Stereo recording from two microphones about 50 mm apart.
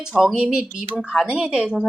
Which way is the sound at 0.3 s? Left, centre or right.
Centre.